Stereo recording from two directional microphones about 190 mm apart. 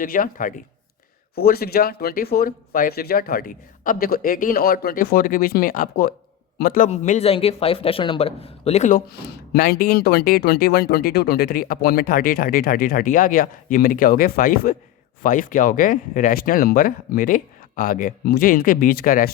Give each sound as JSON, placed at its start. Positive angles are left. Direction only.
{"t": 0.0, "sound": "speech", "side_deg": 50}
{"t": 9.1, "sound": "speech", "side_deg": 55}